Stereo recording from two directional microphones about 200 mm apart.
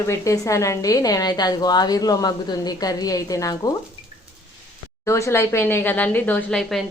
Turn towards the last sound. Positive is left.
turn(degrees=5)  # may be behind; listen again after turning